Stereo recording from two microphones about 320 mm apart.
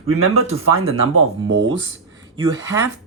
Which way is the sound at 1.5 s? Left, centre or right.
Right.